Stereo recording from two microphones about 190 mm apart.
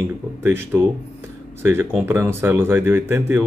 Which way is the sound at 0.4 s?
10° right (ahead or behind).